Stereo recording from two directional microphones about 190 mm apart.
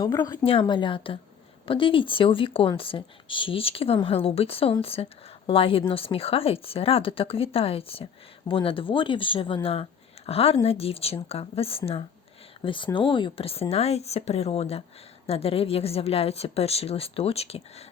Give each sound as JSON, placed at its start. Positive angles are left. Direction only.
{"t": 0.0, "sound": "a woman's voice", "side_deg": 20}